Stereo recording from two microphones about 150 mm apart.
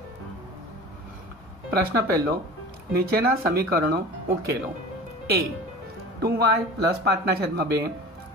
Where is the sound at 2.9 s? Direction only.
80° right.